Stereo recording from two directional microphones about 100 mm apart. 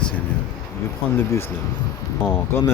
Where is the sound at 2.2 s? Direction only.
25° left (ahead or behind).